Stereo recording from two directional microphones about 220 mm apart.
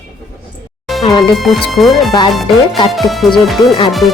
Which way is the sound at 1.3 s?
Centre (ahead or behind).